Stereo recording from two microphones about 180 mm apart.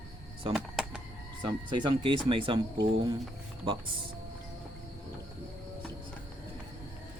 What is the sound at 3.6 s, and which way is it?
Speech, 30° right (ahead or behind).